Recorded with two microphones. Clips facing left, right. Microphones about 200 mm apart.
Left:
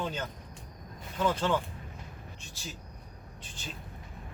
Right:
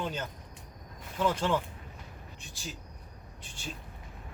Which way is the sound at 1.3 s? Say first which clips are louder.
Left 1 dB; 15° right (ahead or behind).